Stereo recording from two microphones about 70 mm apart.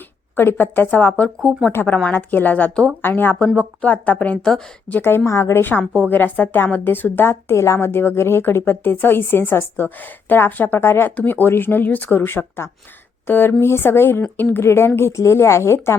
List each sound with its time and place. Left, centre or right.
0.3 s speech: left
3.0 s a woman's voice: left
3.3 s a woman's voice: centre; by 5.6 s left
5.8 s a woman's voice: centre
6.1 s a woman's voice: left